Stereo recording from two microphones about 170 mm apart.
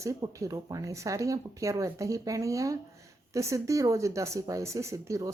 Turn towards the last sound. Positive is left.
turn(degrees=-20)  # may be behind; listen again after turning